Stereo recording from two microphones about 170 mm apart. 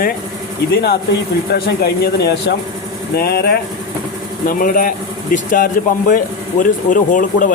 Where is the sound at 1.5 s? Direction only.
70° left (ahead or behind).